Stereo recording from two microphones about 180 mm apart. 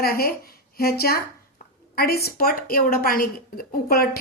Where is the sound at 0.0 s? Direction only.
55° left (ahead or behind).